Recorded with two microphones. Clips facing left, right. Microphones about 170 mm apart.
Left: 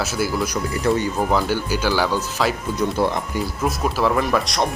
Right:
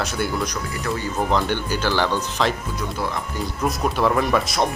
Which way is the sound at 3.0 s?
30° left (ahead or behind).